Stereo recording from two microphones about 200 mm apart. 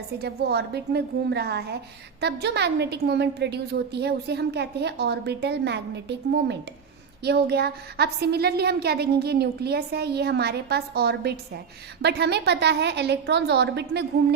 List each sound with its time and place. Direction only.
0.2 s a woman's voice: 55° right (ahead or behind)